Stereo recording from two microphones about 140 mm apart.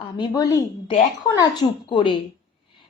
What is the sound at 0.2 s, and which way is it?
A woman's voice, 25° left (ahead or behind).